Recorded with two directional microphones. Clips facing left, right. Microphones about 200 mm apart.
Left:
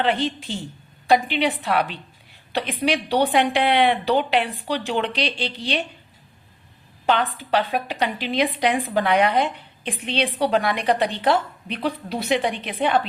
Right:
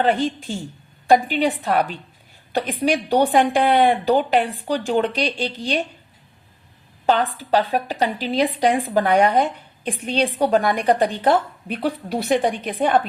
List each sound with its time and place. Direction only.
0.0 s a woman's voice: 45° right (ahead or behind)
7.0 s a woman's voice: 35° right (ahead or behind)